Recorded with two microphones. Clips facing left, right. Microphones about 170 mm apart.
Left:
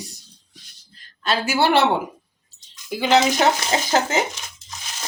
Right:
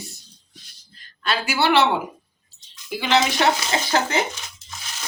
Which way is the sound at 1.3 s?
45° left (ahead or behind).